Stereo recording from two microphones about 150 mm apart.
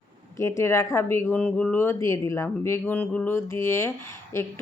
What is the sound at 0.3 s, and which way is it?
Speech, 20° left (ahead or behind).